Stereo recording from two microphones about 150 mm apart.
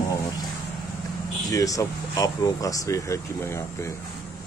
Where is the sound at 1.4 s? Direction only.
20° left (ahead or behind).